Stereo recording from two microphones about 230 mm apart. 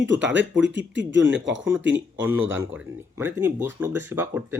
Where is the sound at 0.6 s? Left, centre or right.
Right.